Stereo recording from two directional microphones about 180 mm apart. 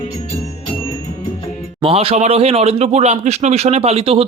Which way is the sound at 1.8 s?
30° right (ahead or behind).